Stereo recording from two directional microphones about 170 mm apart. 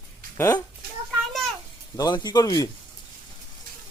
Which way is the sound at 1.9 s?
20° left (ahead or behind).